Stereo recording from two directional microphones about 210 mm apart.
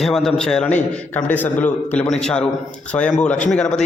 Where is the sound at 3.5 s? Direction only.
5° left (ahead or behind).